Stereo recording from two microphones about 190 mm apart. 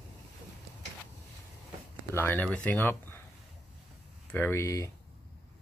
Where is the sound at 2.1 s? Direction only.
10° left (ahead or behind).